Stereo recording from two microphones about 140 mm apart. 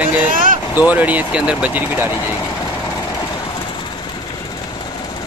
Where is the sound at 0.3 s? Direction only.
75° right (ahead or behind).